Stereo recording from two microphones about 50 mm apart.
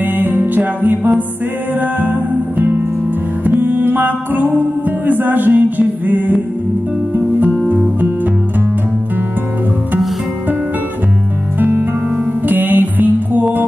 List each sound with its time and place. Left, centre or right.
0.0 s music: right
11.6 s music: right